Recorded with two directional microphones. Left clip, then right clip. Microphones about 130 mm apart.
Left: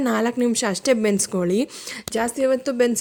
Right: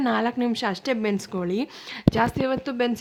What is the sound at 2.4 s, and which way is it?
Speech, 15° left (ahead or behind).